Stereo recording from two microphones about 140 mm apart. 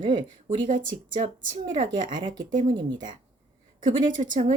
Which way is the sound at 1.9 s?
35° right (ahead or behind).